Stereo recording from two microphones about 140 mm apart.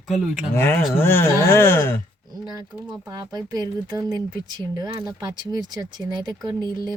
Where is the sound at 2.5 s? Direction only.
25° right (ahead or behind).